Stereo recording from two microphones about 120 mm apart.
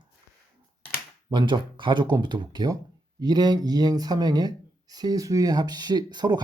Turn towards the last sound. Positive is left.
turn(degrees=-35)  # may be behind; listen again after turning